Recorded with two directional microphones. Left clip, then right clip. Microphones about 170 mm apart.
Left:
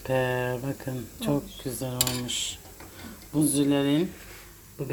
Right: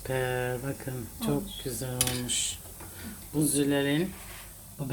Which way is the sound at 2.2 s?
5° left (ahead or behind).